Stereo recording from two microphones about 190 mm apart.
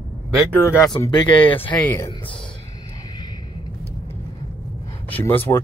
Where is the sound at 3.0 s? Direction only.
20° left (ahead or behind).